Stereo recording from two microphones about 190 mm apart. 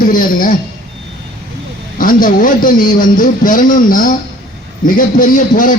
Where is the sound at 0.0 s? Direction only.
45° left (ahead or behind).